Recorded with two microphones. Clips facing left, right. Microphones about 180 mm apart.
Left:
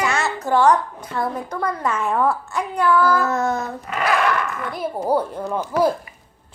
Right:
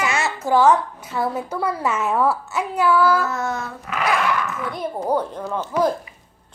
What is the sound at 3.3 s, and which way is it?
Child singing, 35° left (ahead or behind).